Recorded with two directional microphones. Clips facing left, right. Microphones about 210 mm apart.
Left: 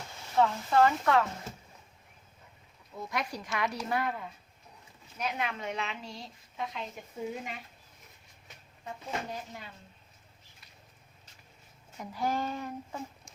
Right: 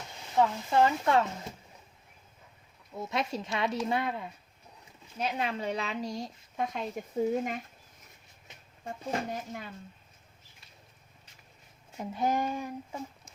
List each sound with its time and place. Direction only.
0.3 s speech: 20° right (ahead or behind)
3.0 s a woman's voice: 25° right (ahead or behind); by 7.6 s 45° right (ahead or behind)
8.8 s speech: 45° right (ahead or behind)
11.9 s speech: 20° right (ahead or behind)